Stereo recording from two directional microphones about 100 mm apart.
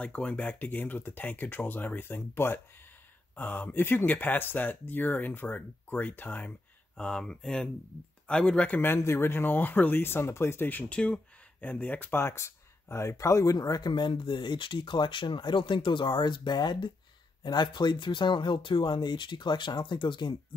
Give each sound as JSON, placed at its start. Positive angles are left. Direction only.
{"t": 0.0, "sound": "speech", "side_deg": 15}
{"t": 7.0, "sound": "speech", "side_deg": 10}